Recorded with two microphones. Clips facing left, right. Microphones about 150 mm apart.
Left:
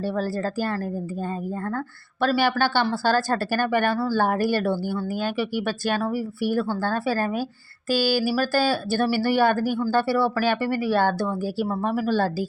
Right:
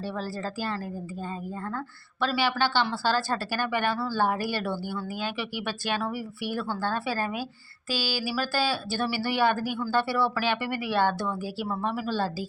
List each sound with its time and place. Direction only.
0.0 s a woman's voice: 45° left (ahead or behind)